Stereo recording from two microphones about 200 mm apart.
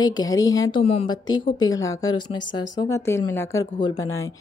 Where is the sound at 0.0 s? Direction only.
20° left (ahead or behind).